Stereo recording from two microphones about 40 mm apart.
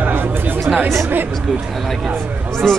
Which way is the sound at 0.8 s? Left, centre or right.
Right.